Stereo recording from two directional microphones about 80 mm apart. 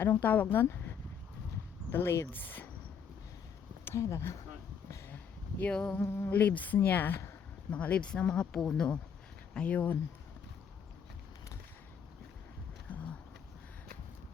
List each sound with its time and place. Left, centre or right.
0.0 s a woman's voice: left
3.8 s speech: left
4.9 s a sound: left
5.7 s speech: centre
6.0 s a woman's voice: left
12.9 s a sound: centre